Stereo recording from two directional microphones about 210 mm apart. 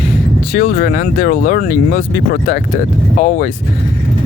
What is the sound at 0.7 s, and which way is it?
Speech, 45° left (ahead or behind).